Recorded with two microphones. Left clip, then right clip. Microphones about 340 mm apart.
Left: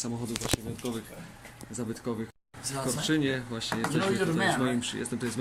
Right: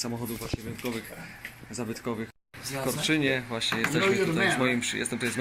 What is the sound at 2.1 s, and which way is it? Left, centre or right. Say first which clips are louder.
Speech: right 1 dB; centre.